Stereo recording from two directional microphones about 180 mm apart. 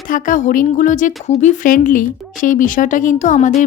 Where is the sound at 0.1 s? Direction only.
45° left (ahead or behind).